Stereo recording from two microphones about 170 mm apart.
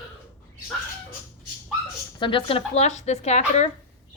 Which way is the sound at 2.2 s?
30° left (ahead or behind).